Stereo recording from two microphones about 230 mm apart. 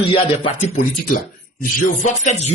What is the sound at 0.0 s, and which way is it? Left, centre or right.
Music, left.